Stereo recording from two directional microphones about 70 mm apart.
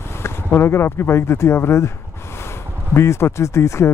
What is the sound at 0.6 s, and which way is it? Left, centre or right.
Speech, left.